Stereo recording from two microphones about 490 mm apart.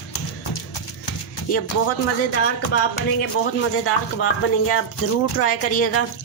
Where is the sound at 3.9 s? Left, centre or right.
Left.